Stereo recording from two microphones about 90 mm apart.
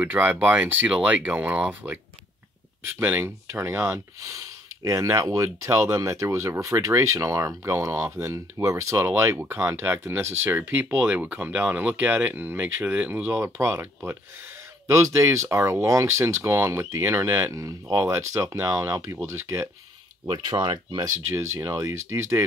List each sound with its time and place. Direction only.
0.0 s speech: 20° right (ahead or behind)
3.0 s speech: 20° right (ahead or behind)
13.3 s speech: 30° right (ahead or behind)
20.2 s speech: 55° right (ahead or behind)
21.3 s speech: 30° right (ahead or behind)